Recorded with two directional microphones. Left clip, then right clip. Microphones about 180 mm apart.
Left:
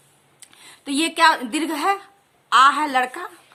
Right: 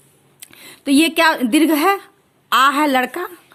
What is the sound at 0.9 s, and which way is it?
A woman's voice, 35° right (ahead or behind).